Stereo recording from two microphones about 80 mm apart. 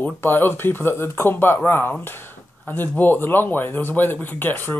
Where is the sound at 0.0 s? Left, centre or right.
Left.